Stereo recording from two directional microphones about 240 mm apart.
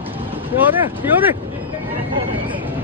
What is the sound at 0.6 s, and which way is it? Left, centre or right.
Vehicle, centre.